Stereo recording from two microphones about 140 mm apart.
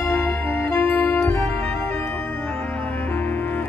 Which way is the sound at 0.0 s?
15° left (ahead or behind).